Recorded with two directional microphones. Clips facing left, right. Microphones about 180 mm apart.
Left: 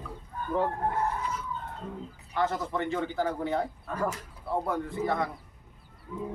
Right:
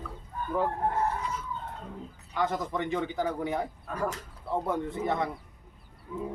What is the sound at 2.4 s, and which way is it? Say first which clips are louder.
A man's voice: left 1 dB; 15° right (ahead or behind).